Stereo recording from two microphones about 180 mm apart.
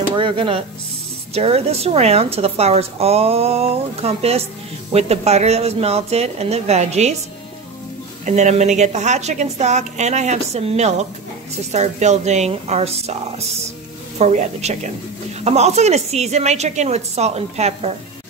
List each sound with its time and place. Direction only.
0.1 s a woman's voice: 30° right (ahead or behind)
8.3 s a woman's voice: 40° right (ahead or behind)